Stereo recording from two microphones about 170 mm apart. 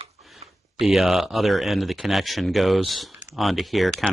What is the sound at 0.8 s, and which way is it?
Speech, centre (ahead or behind).